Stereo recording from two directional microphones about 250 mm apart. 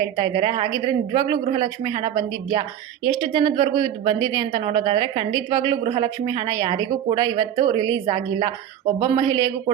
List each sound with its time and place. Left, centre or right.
0.0 s speech: centre